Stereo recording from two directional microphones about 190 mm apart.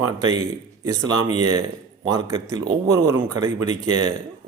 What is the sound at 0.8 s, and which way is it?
Speech, 20° right (ahead or behind).